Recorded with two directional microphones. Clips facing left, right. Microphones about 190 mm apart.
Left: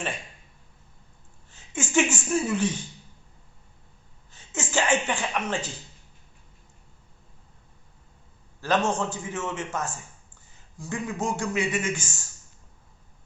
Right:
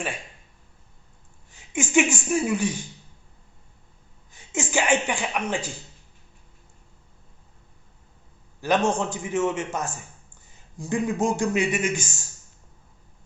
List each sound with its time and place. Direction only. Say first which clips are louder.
1.5 s speech: right 4 dB; 15° right (ahead or behind)
4.3 s speech: right 4 dB; 15° right (ahead or behind)
8.6 s a man's voice: right 2 dB; 15° right (ahead or behind)